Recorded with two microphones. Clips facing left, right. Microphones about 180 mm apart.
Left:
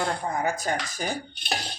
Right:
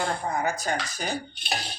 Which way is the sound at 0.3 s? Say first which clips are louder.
Even; 50° left (ahead or behind).